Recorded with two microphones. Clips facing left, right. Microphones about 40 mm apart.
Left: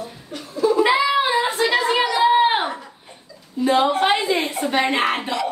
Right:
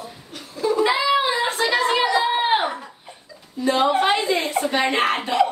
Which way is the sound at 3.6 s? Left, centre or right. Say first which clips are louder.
Left 2 dB; left.